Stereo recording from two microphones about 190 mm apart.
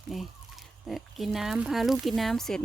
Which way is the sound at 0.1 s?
Centre (ahead or behind).